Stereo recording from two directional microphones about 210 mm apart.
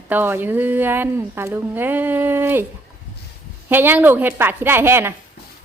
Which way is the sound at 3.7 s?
10° right (ahead or behind).